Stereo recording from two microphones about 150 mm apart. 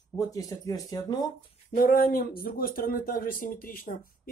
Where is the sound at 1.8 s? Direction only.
70° left (ahead or behind).